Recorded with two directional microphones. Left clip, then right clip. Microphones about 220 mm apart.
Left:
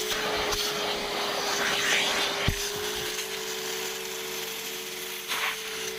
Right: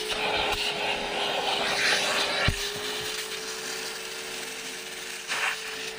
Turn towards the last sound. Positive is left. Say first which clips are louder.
# right 1 dB
turn(degrees=15)  # may be behind; listen again after turning